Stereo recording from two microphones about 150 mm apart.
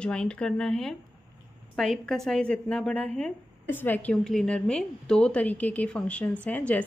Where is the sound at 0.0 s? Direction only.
5° left (ahead or behind).